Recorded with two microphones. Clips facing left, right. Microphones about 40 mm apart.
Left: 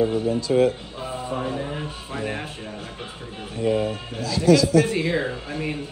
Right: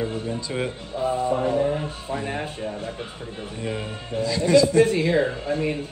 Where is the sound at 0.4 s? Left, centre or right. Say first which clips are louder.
Left 9 dB; centre.